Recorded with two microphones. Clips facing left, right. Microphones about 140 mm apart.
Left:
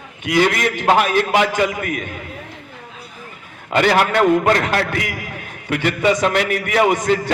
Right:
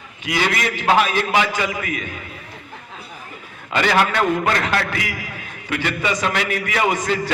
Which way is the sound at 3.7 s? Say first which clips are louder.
Left 3 dB; 50° left (ahead or behind).